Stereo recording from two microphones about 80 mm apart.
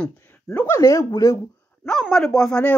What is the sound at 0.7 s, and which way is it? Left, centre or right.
Speech, left.